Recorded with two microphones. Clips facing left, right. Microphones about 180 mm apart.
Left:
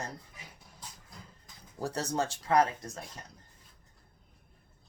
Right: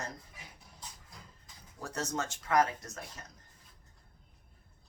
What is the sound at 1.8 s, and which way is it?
Speech, 35° left (ahead or behind).